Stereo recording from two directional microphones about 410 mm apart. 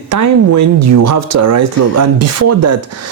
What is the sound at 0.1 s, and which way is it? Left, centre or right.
Speech, right.